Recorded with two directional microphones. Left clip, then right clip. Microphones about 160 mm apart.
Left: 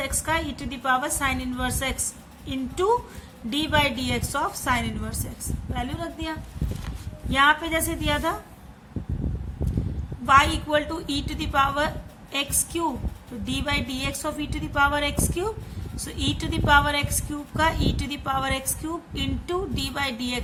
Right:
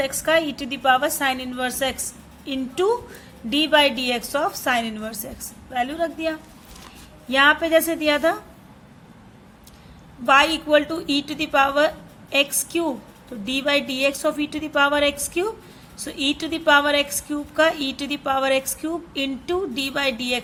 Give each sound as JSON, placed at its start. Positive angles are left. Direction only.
{"t": 0.0, "sound": "a woman's voice", "side_deg": -25}
{"t": 10.2, "sound": "a woman's voice", "side_deg": -25}